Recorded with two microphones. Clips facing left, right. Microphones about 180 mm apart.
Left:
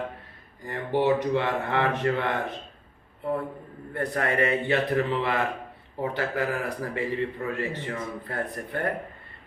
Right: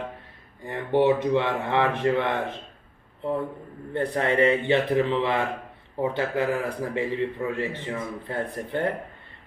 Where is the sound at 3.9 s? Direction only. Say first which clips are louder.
Right 3 dB; 25° right (ahead or behind).